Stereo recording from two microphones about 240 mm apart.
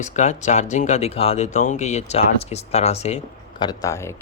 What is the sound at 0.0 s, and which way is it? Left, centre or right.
Speech, left.